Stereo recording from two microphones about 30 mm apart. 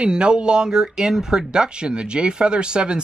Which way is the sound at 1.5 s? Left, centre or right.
Right.